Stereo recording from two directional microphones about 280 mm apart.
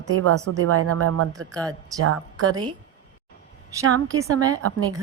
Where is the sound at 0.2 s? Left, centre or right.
Right.